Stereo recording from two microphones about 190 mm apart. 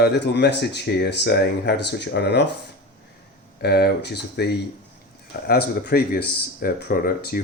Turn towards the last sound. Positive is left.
turn(degrees=50)  # may be behind; listen again after turning